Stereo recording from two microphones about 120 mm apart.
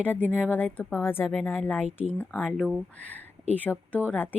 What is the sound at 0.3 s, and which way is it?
Speech, 10° right (ahead or behind).